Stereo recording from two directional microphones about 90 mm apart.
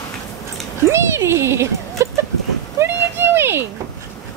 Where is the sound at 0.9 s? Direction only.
30° right (ahead or behind).